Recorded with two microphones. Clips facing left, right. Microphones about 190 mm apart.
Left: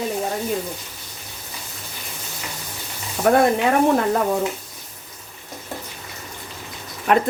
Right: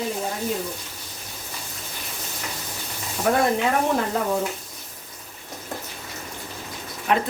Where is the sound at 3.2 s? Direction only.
55° left (ahead or behind).